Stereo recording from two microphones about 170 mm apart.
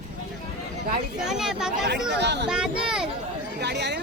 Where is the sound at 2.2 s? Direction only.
85° right.